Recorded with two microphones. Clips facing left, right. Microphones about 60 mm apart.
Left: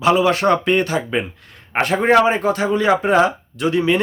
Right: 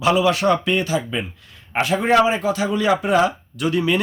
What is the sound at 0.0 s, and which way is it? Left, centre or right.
A man's voice, left.